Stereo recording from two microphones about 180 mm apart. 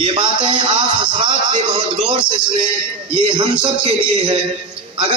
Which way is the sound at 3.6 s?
30° right (ahead or behind).